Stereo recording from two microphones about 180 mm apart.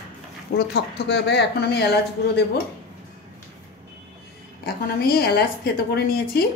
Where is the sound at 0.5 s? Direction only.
65° left (ahead or behind).